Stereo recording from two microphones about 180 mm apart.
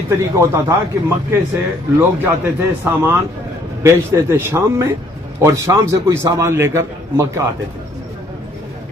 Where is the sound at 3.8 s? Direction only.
15° right (ahead or behind).